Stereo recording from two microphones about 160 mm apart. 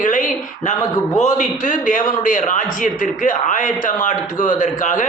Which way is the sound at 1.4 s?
55° left (ahead or behind).